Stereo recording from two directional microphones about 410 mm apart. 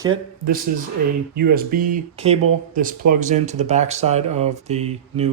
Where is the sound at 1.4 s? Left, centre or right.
Right.